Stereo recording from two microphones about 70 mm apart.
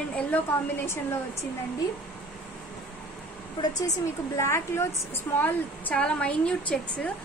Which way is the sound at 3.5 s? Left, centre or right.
Left.